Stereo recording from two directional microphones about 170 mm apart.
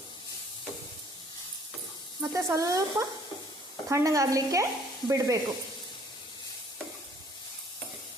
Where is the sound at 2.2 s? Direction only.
15° right (ahead or behind).